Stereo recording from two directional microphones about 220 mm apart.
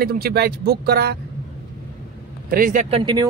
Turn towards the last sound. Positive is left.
turn(degrees=-25)  # may be behind; listen again after turning